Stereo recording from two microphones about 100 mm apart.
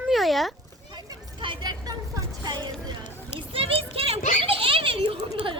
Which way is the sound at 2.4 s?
45° right (ahead or behind).